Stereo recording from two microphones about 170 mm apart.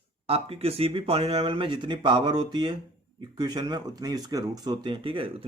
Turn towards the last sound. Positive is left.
turn(degrees=-30)  # may be behind; listen again after turning